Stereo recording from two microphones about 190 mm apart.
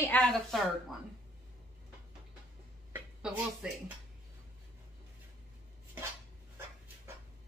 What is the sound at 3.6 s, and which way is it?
Speech, 5° right (ahead or behind).